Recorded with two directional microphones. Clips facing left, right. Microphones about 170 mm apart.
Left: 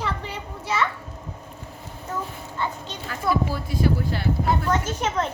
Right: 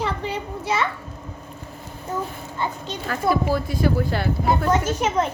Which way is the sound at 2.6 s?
15° right (ahead or behind).